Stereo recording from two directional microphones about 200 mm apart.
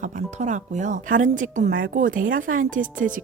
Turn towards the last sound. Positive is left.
turn(degrees=-40)  # may be behind; listen again after turning